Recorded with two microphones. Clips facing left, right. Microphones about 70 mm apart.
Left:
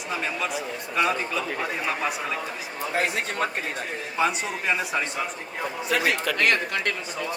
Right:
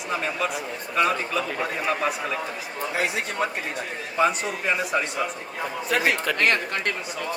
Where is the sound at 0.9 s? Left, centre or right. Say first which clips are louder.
Right 2 dB; centre.